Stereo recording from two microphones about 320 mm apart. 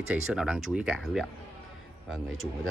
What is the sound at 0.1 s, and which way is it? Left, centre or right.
Speech, centre.